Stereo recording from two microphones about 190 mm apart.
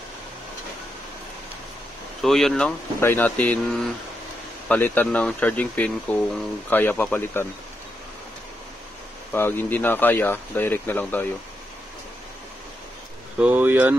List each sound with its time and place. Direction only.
2.2 s speech: centre (ahead or behind)
4.6 s speech: 10° left (ahead or behind)
9.3 s speech: 10° left (ahead or behind)
13.4 s speech: 10° right (ahead or behind)